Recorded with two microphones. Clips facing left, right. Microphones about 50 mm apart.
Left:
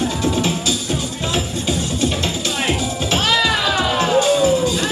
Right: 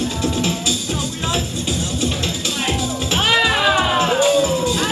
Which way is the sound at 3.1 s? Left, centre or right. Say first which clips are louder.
Right 1 dB; right.